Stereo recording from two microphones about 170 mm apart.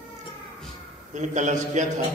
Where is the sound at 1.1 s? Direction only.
45° right (ahead or behind).